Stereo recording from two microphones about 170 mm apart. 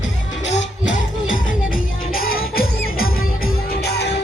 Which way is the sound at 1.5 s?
55° left (ahead or behind).